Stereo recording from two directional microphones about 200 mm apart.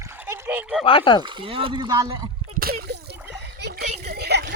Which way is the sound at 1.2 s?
25° right (ahead or behind).